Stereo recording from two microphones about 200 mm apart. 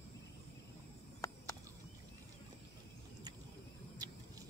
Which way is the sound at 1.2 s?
15° left (ahead or behind).